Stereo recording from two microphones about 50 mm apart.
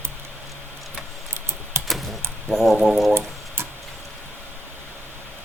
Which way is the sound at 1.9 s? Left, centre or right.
Centre.